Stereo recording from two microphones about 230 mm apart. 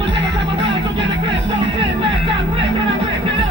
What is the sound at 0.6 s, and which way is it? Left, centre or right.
Music, right.